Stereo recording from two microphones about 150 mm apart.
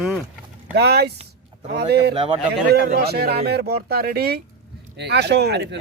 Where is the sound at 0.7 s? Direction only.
90° right.